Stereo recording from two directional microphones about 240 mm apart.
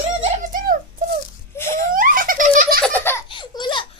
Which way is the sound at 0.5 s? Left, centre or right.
Right.